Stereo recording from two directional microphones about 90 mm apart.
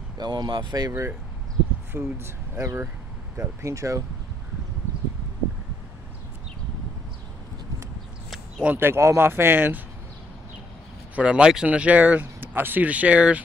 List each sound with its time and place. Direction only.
0.2 s speech: 55° right (ahead or behind)
1.9 s speech: 25° right (ahead or behind)
8.6 s speech: 25° right (ahead or behind)
11.1 s speech: 10° right (ahead or behind)